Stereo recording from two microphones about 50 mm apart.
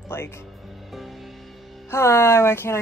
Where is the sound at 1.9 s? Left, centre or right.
Left.